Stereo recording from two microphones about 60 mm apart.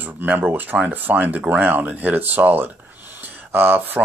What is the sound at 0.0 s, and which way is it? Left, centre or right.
Speech, right.